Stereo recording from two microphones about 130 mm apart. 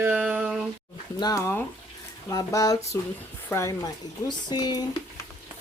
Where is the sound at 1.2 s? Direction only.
25° left (ahead or behind).